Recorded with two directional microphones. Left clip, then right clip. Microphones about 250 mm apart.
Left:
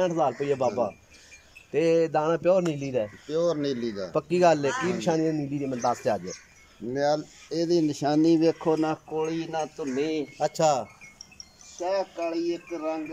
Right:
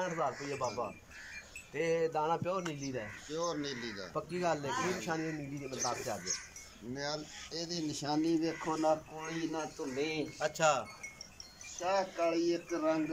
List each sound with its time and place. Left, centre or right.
0.0 s speech: left
10.4 s speech: left
12.2 s speech: centre